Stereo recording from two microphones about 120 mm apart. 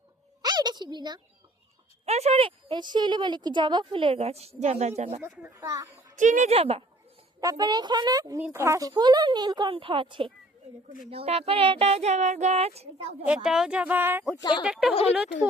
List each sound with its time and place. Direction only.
0.4 s a sound: 35° right (ahead or behind)
2.0 s a woman's voice: 65° right (ahead or behind)
5.4 s a child's voice: 25° right (ahead or behind)
6.1 s speech: 90° right; by 6.8 s 55° right (ahead or behind)
7.4 s a woman's voice: 30° right (ahead or behind); by 12.9 s 60° right (ahead or behind)
13.2 s speech: 5° right (ahead or behind)
14.6 s speech: 5° right (ahead or behind)